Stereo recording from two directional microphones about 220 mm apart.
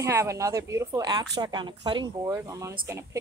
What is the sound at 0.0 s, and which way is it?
A woman's voice, 10° right (ahead or behind).